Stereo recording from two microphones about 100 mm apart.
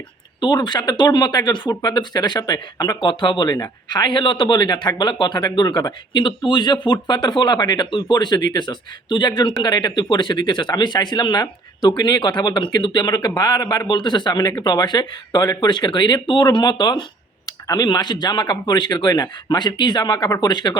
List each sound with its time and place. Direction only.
0.3 s speech: 50° left (ahead or behind)
3.1 s speech: 55° left (ahead or behind)